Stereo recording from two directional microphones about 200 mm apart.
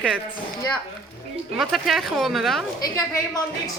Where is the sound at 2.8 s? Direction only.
15° left (ahead or behind).